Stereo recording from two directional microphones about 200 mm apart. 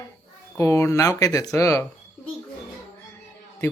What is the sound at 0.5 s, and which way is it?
Speech, 15° left (ahead or behind).